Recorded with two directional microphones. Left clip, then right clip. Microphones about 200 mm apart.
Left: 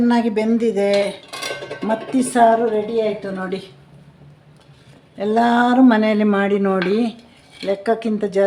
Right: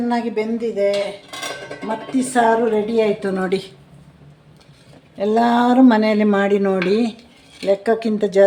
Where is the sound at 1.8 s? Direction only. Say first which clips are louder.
Left 2 dB; 35° left (ahead or behind).